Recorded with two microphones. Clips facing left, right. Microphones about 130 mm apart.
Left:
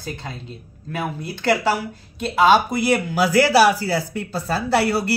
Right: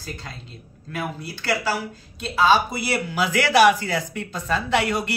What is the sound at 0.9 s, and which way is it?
Speech, 55° left (ahead or behind).